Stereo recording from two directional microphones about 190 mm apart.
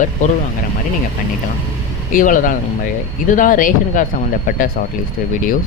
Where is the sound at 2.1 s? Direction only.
45° left (ahead or behind).